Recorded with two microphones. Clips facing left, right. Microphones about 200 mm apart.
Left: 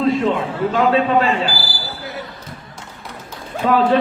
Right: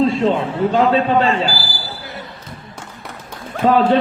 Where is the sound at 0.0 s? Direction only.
30° right (ahead or behind).